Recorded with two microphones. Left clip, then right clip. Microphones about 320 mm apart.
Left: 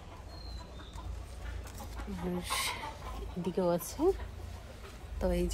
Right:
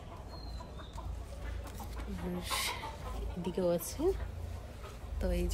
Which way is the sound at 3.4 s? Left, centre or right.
Centre.